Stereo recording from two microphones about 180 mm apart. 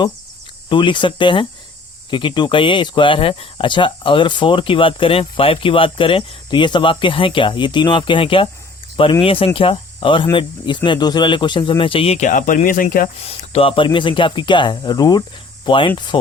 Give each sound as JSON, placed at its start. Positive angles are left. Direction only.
{"t": 0.7, "sound": "speech", "side_deg": 25}
{"t": 13.2, "sound": "speech", "side_deg": 30}